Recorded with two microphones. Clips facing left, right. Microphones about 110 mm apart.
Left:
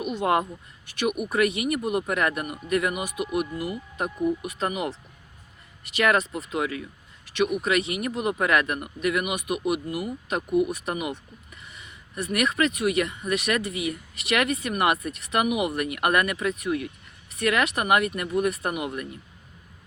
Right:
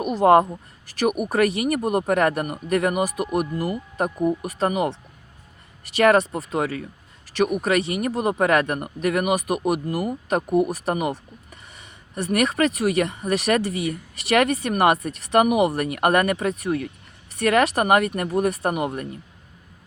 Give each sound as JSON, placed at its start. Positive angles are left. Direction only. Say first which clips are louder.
{"t": 0.0, "sound": "speech", "louder": "right 8 dB", "side_deg": -40}
{"t": 5.9, "sound": "speech", "louder": "right 6 dB", "side_deg": -35}